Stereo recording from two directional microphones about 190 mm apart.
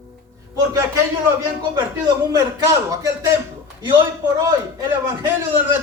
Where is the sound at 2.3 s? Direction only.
20° right (ahead or behind).